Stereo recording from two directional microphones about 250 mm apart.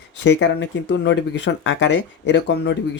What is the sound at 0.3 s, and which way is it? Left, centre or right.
Speech, left.